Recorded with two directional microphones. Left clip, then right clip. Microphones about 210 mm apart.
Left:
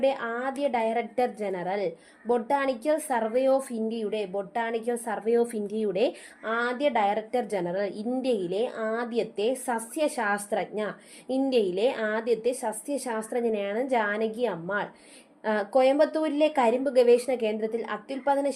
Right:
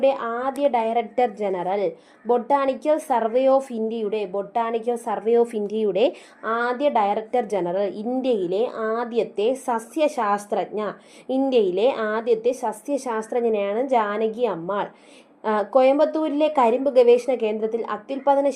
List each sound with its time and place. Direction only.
0.0 s a woman's voice: 20° right (ahead or behind)